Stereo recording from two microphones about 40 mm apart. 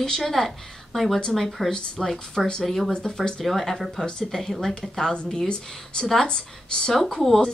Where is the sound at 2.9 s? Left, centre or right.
Centre.